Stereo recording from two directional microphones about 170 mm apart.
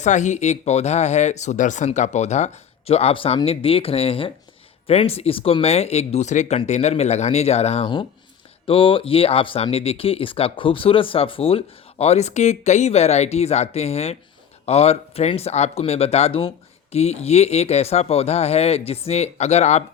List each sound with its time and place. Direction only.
0.0 s speech: 45° left (ahead or behind)